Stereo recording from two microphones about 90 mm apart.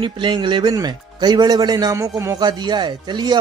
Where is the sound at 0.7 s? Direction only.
50° right (ahead or behind).